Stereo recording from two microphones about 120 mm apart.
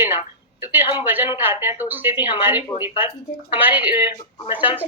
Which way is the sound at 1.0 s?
15° right (ahead or behind).